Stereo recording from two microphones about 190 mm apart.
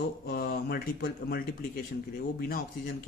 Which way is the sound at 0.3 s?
55° left (ahead or behind).